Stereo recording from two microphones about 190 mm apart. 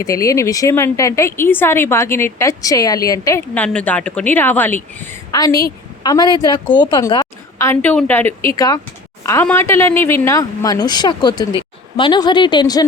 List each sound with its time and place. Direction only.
0.0 s a woman's voice: 15° left (ahead or behind)